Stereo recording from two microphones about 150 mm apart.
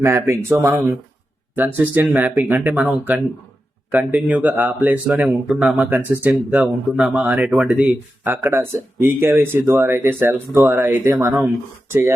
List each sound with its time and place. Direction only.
0.0 s speech: 20° right (ahead or behind)